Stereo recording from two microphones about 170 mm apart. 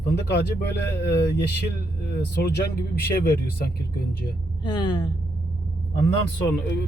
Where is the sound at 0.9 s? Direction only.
80° left.